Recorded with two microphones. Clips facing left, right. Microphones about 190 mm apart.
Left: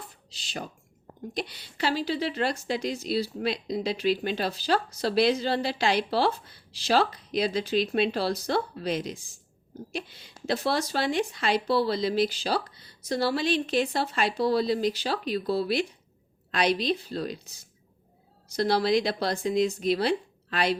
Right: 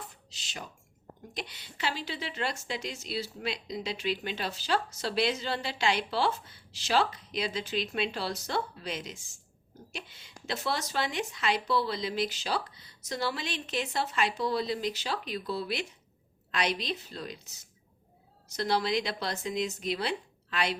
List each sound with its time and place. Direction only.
1.3 s a woman's voice: 35° left (ahead or behind)